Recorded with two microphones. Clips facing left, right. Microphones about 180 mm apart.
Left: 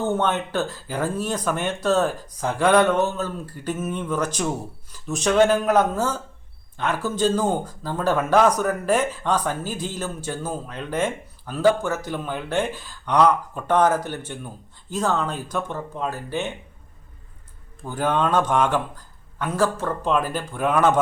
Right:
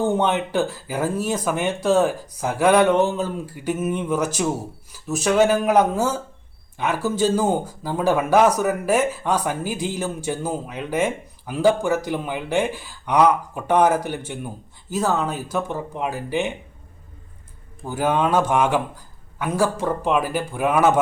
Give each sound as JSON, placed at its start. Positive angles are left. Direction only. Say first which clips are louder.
{"t": 0.0, "sound": "speech", "louder": "right 2 dB", "side_deg": -10}
{"t": 17.8, "sound": "speech", "louder": "right 2 dB", "side_deg": -10}